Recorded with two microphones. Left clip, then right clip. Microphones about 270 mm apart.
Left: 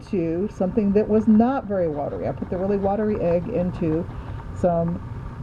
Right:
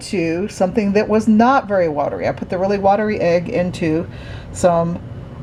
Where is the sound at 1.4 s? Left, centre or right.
Right.